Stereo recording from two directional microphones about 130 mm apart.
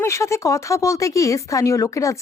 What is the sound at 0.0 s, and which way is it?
Speech, 20° left (ahead or behind).